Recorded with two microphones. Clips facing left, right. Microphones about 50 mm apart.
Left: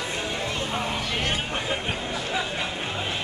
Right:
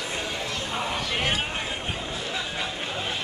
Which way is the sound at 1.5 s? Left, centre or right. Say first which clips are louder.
Left 3 dB; left.